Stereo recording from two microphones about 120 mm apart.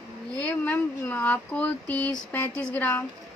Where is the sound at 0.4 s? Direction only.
10° left (ahead or behind).